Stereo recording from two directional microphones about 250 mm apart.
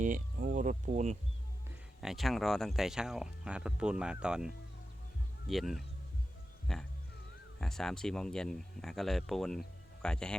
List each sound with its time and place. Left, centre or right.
0.0 s speech: right
2.0 s speech: centre